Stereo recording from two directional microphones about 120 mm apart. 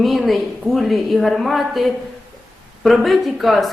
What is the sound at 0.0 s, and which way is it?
Speech, centre (ahead or behind).